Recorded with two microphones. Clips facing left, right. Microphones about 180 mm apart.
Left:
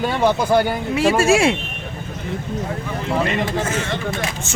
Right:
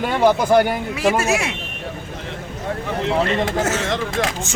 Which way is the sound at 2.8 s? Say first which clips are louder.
Right 3 dB; 80° right.